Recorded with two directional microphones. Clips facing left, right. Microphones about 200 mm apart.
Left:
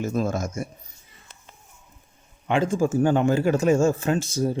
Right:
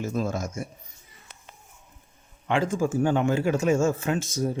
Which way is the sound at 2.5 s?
25° left (ahead or behind).